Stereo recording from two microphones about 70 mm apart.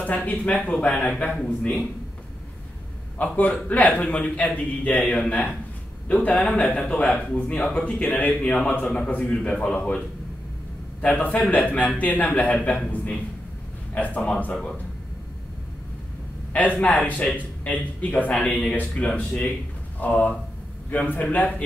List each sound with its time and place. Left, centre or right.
0.0 s speech: left
3.2 s a man's voice: left
13.9 s a man's voice: left
16.5 s a man's voice: left